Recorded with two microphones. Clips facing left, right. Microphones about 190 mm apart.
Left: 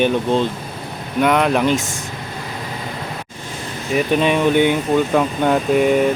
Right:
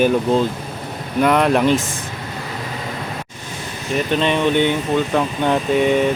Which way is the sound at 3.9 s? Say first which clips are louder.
Left 2 dB; 10° left (ahead or behind).